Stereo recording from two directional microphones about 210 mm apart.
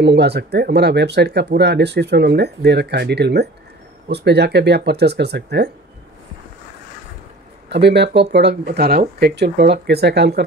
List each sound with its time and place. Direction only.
0.0 s speech: 50° right (ahead or behind)
7.7 s speech: 55° right (ahead or behind)